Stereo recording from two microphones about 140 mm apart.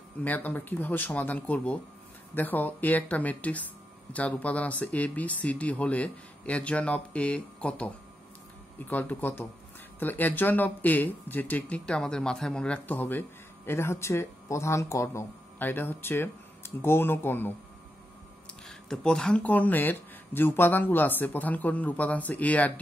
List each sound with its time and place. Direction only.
0.2 s speech: 10° left (ahead or behind)
18.7 s speech: 5° left (ahead or behind)